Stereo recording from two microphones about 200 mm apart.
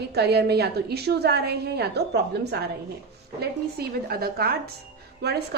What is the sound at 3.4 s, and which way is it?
A woman's voice, 50° right (ahead or behind).